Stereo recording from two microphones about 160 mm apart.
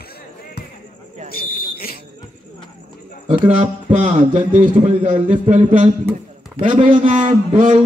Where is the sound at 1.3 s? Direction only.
70° left (ahead or behind).